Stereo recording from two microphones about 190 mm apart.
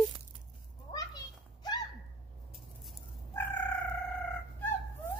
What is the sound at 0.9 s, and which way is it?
Children playing, 20° left (ahead or behind).